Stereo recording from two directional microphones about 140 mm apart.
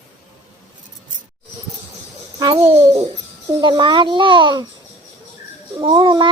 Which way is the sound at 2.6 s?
20° right (ahead or behind).